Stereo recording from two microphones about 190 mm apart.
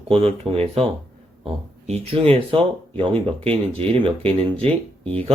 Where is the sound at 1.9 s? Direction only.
30° right (ahead or behind).